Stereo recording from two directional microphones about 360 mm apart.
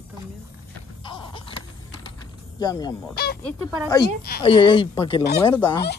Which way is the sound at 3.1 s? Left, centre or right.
Left.